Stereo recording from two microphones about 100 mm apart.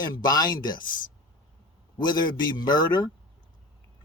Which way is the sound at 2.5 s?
45° left (ahead or behind).